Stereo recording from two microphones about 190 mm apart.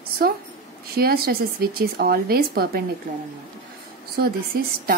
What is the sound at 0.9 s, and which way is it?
Speech, 55° right (ahead or behind).